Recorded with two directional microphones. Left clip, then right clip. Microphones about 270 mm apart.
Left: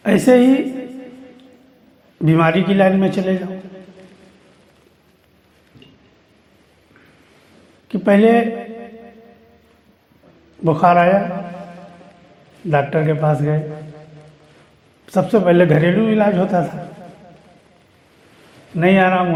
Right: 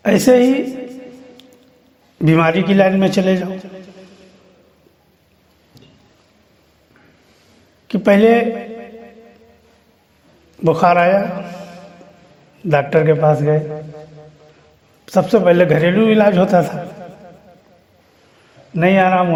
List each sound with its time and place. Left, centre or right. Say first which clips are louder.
0.0 s a sound: right 1 dB; right
2.1 s a man's voice: right 1 dB; right
7.9 s a sound: right 2 dB; right
10.6 s a man's voice: right 1 dB; right
15.0 s a man's voice: right 3 dB; right
18.8 s a man's voice: right 1 dB; right